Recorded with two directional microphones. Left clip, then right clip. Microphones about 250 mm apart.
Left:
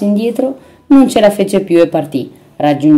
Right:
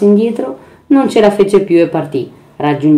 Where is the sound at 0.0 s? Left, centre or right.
Left.